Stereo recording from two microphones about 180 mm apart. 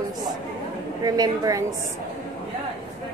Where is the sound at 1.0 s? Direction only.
20° right (ahead or behind).